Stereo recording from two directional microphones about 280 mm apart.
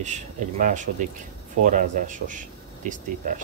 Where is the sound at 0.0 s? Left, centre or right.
Right.